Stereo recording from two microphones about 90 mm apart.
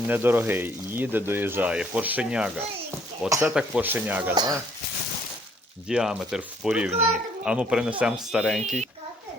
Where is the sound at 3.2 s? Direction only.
35° right (ahead or behind).